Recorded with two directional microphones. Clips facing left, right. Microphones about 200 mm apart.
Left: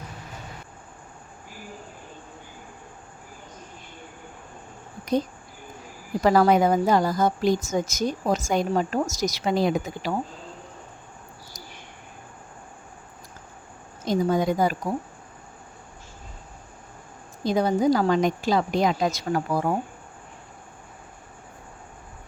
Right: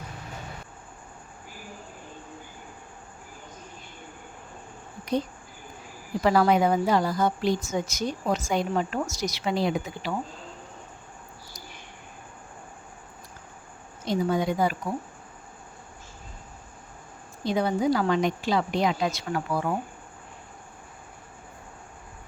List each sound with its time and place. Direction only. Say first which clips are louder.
6.2 s speech: left 3 dB; 40° left (ahead or behind)
14.0 s speech: left 3 dB; 45° left (ahead or behind)
17.4 s a woman's voice: left 3 dB; 40° left (ahead or behind)